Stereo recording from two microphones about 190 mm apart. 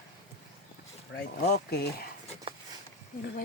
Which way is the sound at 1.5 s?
60° left (ahead or behind).